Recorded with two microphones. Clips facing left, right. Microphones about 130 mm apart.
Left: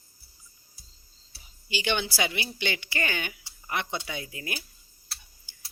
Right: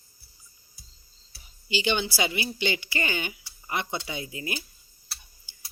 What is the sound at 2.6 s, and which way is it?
Speech, 55° left (ahead or behind).